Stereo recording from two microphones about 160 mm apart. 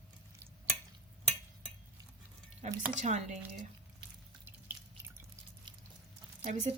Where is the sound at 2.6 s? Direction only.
45° right (ahead or behind).